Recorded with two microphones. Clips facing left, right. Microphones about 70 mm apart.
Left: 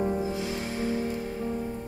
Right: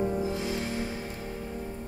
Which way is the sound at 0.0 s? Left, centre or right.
Centre.